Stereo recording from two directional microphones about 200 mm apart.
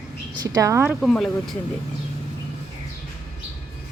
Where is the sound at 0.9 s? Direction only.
Centre (ahead or behind).